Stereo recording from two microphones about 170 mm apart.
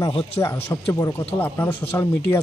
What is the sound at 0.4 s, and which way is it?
Speech, 15° left (ahead or behind).